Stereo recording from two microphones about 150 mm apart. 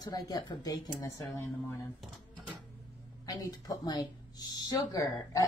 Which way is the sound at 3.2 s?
25° left (ahead or behind).